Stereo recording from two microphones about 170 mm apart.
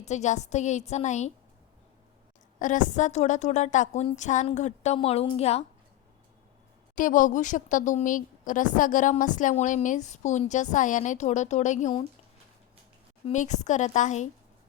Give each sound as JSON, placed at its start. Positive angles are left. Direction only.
{"t": 0.0, "sound": "speech", "side_deg": 45}
{"t": 2.6, "sound": "speech", "side_deg": 50}
{"t": 6.9, "sound": "speech", "side_deg": 50}
{"t": 13.2, "sound": "speech", "side_deg": 45}